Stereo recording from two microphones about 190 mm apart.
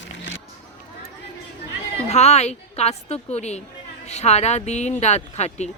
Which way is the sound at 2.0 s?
35° left (ahead or behind).